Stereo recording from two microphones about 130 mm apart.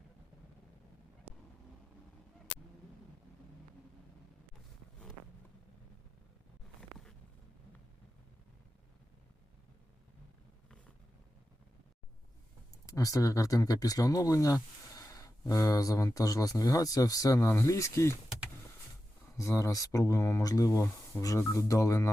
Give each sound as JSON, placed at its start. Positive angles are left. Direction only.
{"t": 1.3, "sound": "vehicle", "side_deg": -10}
{"t": 12.8, "sound": "speech", "side_deg": 25}
{"t": 19.4, "sound": "speech", "side_deg": 25}